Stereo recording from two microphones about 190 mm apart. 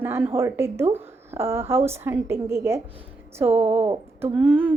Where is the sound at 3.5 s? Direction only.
30° right (ahead or behind).